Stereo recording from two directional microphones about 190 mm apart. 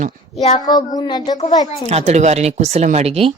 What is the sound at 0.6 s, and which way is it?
Speech, 20° left (ahead or behind).